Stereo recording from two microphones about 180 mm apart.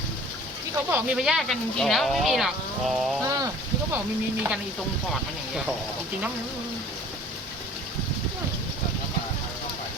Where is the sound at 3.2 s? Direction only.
20° right (ahead or behind).